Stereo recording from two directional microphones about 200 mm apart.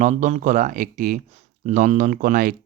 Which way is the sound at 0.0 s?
35° right (ahead or behind).